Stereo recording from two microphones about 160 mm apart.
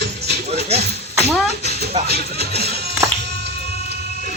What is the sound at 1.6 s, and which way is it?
Music, 90° right.